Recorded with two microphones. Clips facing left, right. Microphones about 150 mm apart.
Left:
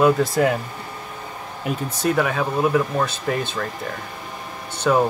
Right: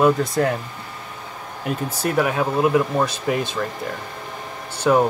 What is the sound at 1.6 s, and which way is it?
Speech, 5° right (ahead or behind).